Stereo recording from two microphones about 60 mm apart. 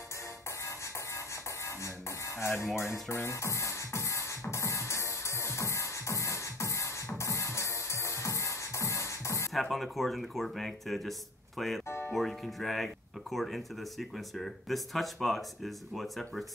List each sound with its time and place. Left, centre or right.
0.7 s music: left
9.5 s speech: centre